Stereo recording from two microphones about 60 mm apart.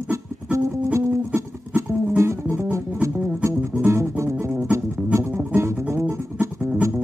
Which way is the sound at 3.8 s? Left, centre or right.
Right.